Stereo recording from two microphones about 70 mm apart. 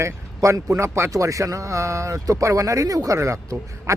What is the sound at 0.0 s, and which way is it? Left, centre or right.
Speech, right.